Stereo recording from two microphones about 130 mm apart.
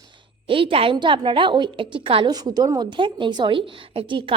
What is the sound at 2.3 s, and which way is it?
A woman's voice, 30° right (ahead or behind).